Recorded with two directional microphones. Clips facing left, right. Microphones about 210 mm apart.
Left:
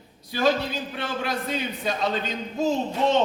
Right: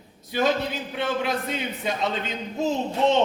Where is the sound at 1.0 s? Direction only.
20° right (ahead or behind).